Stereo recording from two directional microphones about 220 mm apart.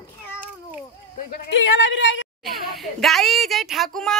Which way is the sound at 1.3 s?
55° left (ahead or behind).